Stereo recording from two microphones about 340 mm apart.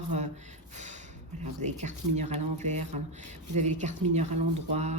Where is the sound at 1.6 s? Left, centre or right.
Centre.